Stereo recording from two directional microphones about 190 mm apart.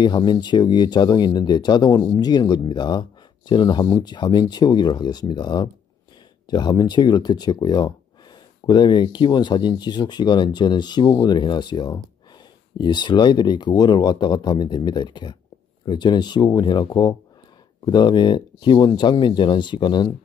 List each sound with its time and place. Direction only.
0.0 s speech: 25° left (ahead or behind)